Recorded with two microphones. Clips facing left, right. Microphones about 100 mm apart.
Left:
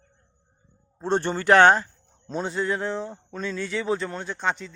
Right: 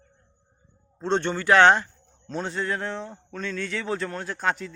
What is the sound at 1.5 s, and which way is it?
Speech, 45° left (ahead or behind).